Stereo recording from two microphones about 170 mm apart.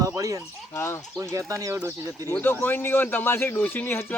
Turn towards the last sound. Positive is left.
turn(degrees=10)  # may be behind; listen again after turning